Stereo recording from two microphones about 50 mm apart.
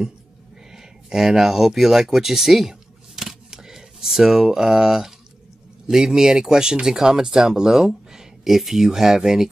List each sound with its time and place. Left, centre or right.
0.7 s speech: centre